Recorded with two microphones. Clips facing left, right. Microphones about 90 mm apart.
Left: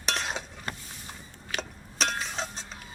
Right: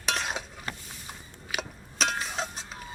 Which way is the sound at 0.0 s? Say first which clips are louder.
Right 1 dB; centre (ahead or behind).